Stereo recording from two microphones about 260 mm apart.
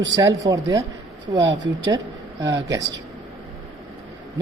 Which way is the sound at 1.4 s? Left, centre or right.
Right.